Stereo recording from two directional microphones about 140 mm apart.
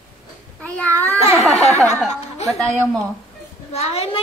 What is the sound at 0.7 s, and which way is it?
Babbling, 10° left (ahead or behind).